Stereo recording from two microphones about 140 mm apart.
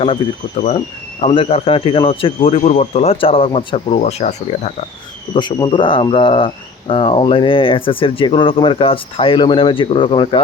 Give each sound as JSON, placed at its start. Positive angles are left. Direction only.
{"t": 0.5, "sound": "speech", "side_deg": 60}
{"t": 1.2, "sound": "speech", "side_deg": 45}
{"t": 3.9, "sound": "speech", "side_deg": 55}
{"t": 5.3, "sound": "speech", "side_deg": 30}